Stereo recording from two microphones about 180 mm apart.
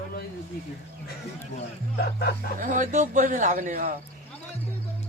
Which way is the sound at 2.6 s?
45° right (ahead or behind).